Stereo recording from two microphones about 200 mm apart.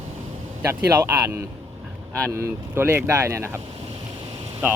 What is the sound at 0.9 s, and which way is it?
Speech, 15° right (ahead or behind).